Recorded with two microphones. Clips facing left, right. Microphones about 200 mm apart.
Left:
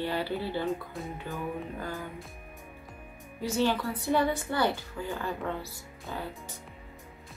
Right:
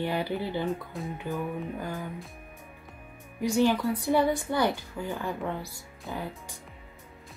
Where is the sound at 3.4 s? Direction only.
15° right (ahead or behind).